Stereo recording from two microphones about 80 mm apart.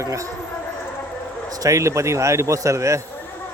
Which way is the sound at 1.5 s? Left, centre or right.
Right.